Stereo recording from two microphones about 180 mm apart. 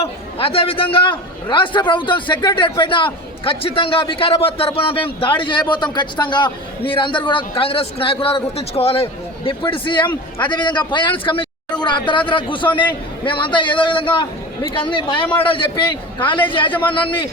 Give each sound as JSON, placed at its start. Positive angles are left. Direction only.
{"t": 0.0, "sound": "a man's voice", "side_deg": 30}